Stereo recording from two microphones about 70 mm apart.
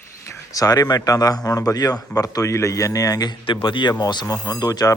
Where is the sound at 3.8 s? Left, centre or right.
Left.